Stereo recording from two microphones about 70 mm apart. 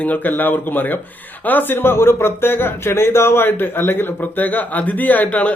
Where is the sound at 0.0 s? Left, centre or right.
Left.